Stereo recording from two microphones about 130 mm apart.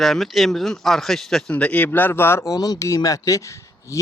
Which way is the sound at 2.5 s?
30° left (ahead or behind).